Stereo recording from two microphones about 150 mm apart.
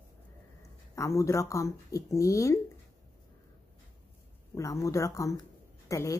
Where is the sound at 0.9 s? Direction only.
20° left (ahead or behind).